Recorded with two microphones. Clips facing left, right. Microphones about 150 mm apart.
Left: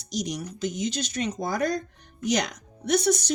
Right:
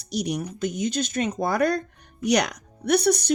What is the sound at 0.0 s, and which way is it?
Speech, 60° right (ahead or behind).